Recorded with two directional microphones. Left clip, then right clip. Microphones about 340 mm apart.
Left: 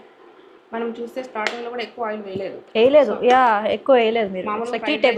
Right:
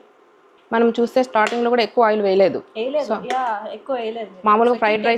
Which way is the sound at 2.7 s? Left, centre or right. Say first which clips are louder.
Left 7 dB; left.